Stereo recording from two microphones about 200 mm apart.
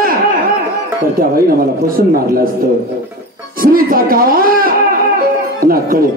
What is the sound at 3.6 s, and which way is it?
Speech, 45° right (ahead or behind).